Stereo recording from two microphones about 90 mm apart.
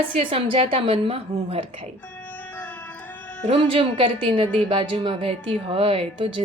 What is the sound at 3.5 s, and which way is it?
A woman's voice, 90° right.